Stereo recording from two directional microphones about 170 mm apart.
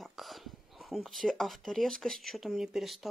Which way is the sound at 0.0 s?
Centre (ahead or behind).